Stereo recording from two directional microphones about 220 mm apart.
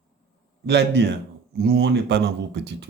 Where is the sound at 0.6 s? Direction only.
50° right (ahead or behind).